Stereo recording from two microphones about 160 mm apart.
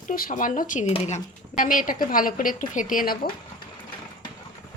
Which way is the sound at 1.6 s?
60° left (ahead or behind).